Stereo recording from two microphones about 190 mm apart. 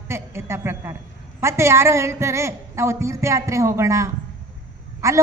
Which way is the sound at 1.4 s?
15° right (ahead or behind).